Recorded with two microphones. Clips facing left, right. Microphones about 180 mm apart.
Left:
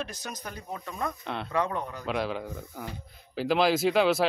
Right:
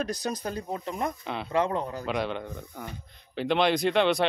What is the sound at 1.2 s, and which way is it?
Speech, centre (ahead or behind).